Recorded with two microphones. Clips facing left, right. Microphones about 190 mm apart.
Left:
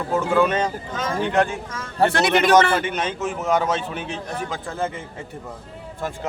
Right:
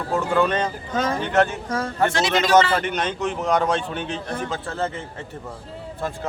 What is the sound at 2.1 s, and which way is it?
Speech, 60° left (ahead or behind).